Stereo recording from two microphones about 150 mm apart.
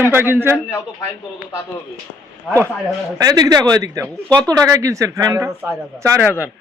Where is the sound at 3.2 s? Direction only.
25° right (ahead or behind).